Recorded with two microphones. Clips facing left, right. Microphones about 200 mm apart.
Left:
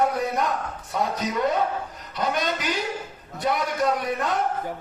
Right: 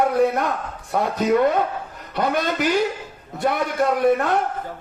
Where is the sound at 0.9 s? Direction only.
55° right (ahead or behind).